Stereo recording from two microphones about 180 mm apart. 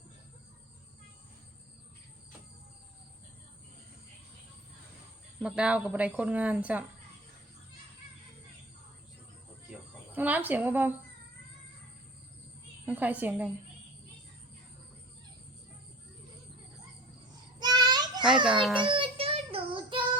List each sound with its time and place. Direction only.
5.4 s speech: 5° right (ahead or behind)
10.2 s speech: 10° right (ahead or behind)
12.8 s speech: 10° right (ahead or behind)
17.6 s child singing: 25° right (ahead or behind)